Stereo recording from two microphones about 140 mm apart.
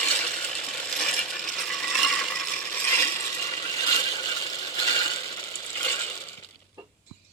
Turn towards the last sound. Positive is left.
turn(degrees=20)  # may be behind; listen again after turning